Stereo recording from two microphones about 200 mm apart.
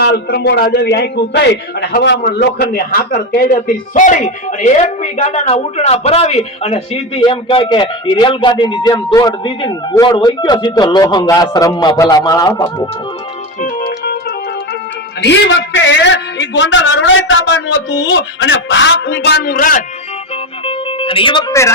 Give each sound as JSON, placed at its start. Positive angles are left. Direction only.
{"t": 0.0, "sound": "a man's voice", "side_deg": 55}
{"t": 13.6, "sound": "organ", "side_deg": 45}
{"t": 15.2, "sound": "a man's voice", "side_deg": 65}
{"t": 20.7, "sound": "music", "side_deg": 25}